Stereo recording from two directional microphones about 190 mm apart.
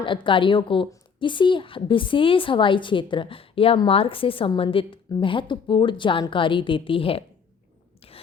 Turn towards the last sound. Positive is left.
turn(degrees=30)  # may be behind; listen again after turning